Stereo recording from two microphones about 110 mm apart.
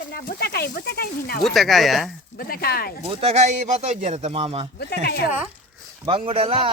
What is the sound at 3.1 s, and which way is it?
Speech, 65° right (ahead or behind).